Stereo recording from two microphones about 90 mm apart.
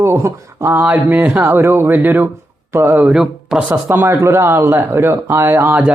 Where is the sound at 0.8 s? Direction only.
20° right (ahead or behind).